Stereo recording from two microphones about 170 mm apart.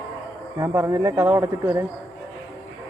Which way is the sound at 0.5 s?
15° right (ahead or behind).